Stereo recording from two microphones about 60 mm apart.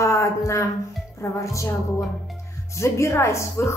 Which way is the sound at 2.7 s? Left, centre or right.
Left.